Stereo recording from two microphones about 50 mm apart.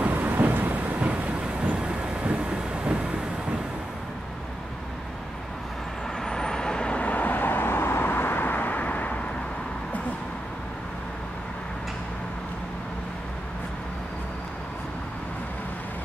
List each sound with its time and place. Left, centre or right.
0.0 s train: right
6.2 s vehicle: centre; by 9.2 s left